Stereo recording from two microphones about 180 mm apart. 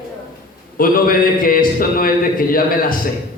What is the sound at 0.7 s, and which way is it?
Speech, 50° left (ahead or behind).